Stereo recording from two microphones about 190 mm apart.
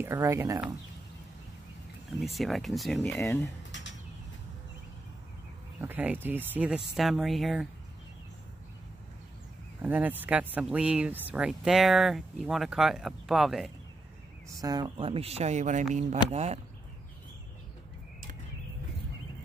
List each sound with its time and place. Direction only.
0.0 s speech: 15° right (ahead or behind)
2.3 s speech: centre (ahead or behind)
5.8 s speech: 10° right (ahead or behind)
9.8 s speech: 10° right (ahead or behind)
14.6 s speech: 20° right (ahead or behind)